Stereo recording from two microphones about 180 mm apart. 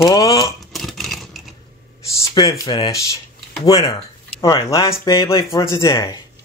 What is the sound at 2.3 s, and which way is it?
Speech, 25° left (ahead or behind).